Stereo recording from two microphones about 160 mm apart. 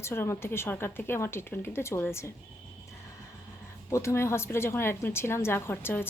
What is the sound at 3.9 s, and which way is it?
A woman's voice, 15° left (ahead or behind).